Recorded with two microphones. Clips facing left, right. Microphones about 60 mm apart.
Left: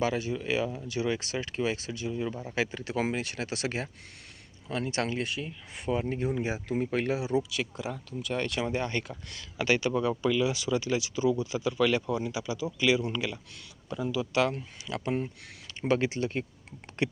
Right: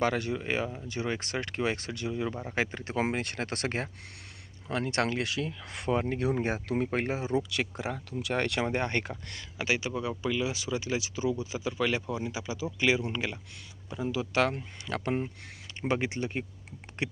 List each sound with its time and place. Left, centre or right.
0.0 s speech: right
2.6 s speech: right
7.0 s speech: right
7.8 s speech: right
9.6 s speech: centre; by 14.4 s right
14.4 s speech: right
15.9 s speech: right